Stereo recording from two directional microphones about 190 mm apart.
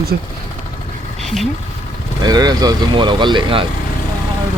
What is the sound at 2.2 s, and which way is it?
Speech, 20° right (ahead or behind).